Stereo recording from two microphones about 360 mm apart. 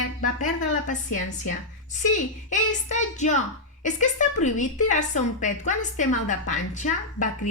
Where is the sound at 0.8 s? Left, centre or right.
Left.